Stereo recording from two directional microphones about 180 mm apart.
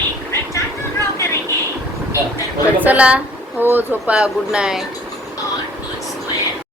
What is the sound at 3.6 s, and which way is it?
Speech, 10° right (ahead or behind).